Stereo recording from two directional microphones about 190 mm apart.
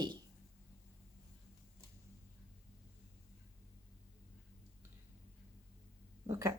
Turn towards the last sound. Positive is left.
turn(degrees=-15)  # may be behind; listen again after turning